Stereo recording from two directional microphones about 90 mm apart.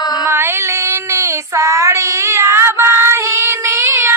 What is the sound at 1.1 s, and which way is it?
Child singing, 30° right (ahead or behind).